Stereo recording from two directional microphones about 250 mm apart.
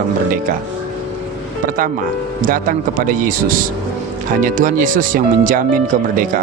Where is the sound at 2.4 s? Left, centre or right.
Right.